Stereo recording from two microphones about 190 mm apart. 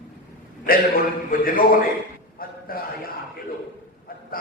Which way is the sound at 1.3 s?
50° left (ahead or behind).